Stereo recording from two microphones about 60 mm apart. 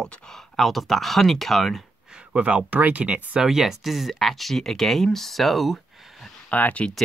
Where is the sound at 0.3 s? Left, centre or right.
Centre.